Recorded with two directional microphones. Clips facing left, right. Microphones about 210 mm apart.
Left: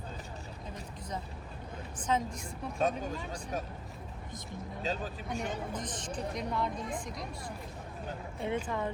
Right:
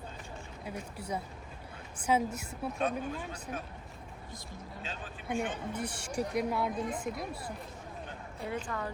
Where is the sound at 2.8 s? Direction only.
40° left (ahead or behind).